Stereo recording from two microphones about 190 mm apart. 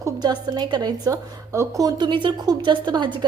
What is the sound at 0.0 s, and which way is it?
A woman's voice, 20° right (ahead or behind).